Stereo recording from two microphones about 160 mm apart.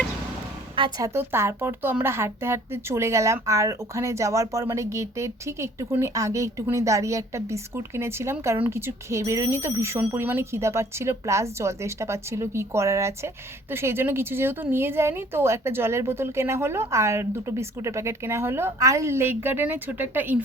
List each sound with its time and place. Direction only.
0.8 s a woman's voice: 25° right (ahead or behind)